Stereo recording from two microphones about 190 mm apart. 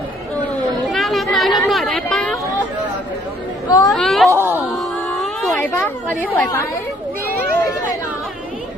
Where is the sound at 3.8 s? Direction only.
Centre (ahead or behind).